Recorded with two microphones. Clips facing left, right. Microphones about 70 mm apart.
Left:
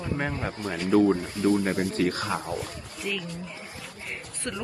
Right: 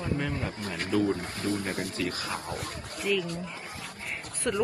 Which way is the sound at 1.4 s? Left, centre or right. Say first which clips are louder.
Left 7 dB; left.